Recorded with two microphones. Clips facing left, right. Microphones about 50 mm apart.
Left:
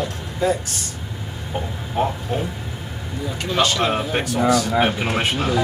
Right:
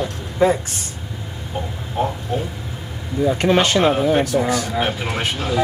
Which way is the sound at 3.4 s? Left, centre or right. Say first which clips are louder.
Right 2 dB; right.